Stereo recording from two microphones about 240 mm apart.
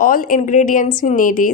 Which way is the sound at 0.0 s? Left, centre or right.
Left.